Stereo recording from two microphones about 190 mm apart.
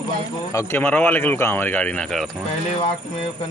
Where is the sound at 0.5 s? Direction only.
15° left (ahead or behind).